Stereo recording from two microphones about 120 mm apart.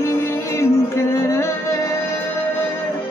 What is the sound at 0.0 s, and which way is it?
Music, 20° left (ahead or behind).